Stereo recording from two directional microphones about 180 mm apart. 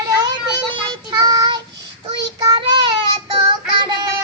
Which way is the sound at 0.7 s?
25° right (ahead or behind).